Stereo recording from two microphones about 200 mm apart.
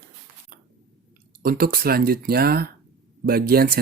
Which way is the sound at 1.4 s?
50° right (ahead or behind).